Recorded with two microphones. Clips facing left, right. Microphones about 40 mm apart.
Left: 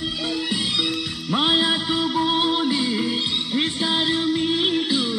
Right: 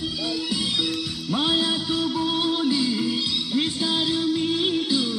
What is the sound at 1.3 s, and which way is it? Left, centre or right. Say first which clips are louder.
Music: left 3 dB; left.